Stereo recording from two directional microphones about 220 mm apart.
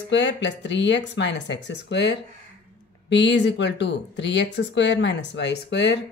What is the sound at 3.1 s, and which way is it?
Speech, 55° left (ahead or behind).